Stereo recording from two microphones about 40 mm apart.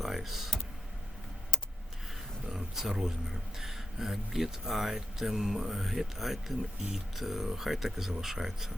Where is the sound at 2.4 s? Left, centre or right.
Centre.